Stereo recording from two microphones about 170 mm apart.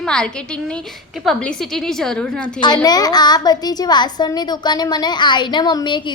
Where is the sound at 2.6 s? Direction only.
25° left (ahead or behind).